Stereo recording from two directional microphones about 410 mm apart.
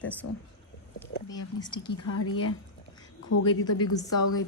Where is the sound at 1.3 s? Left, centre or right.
Centre.